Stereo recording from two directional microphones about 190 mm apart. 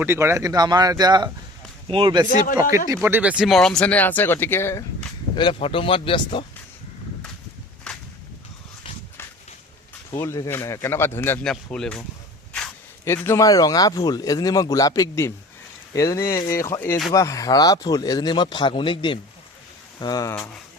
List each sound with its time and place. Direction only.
0.0 s speech: 10° right (ahead or behind)
2.7 s speech: 15° right (ahead or behind); by 6.4 s 25° left (ahead or behind)
7.9 s whip: 5° left (ahead or behind)
10.1 s speech: 15° left (ahead or behind)
13.1 s speech: 15° left (ahead or behind)